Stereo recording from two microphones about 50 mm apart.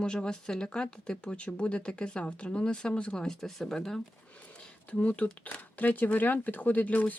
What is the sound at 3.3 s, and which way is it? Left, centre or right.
Speech, centre.